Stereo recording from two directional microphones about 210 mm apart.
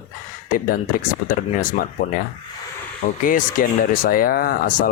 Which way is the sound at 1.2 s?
90° left.